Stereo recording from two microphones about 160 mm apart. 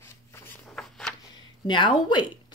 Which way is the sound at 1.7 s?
30° left (ahead or behind).